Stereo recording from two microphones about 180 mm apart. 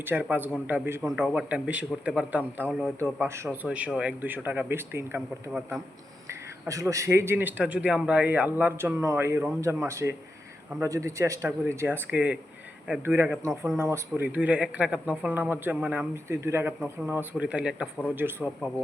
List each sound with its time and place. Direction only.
0.0 s speech: 10° right (ahead or behind)
1.0 s a man's voice: 5° right (ahead or behind)
3.0 s speech: 15° right (ahead or behind)
6.2 s speech: 15° right (ahead or behind)